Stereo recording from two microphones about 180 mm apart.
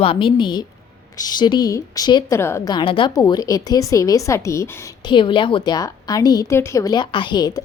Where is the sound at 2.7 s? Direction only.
30° left (ahead or behind).